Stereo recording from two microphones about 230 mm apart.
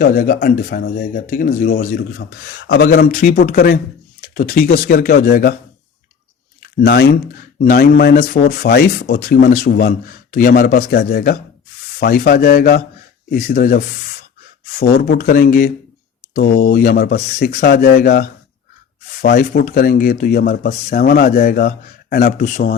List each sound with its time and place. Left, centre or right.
0.0 s speech: left
6.8 s speech: left